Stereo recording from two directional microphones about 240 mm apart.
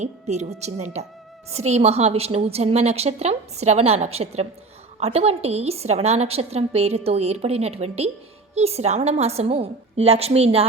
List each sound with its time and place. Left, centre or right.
0.0 s a woman's voice: right